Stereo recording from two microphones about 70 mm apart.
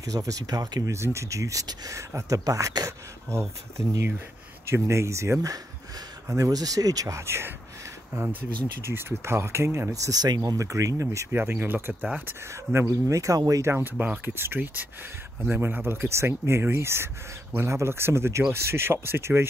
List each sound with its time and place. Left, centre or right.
0.0 s speech: right
0.9 s speech: right
4.6 s speech: right
7.2 s speech: right
9.9 s speech: right
11.3 s speech: right
12.7 s speech: right
13.7 s speech: right